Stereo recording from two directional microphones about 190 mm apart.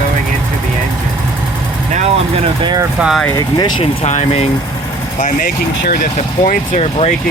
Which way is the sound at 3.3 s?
25° left (ahead or behind).